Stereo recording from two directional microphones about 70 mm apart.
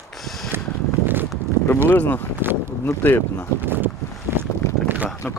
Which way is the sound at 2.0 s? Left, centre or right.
Left.